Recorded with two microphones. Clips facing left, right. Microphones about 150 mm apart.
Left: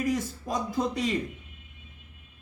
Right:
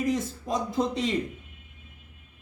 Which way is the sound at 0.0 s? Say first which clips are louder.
Right 1 dB; 25° right (ahead or behind).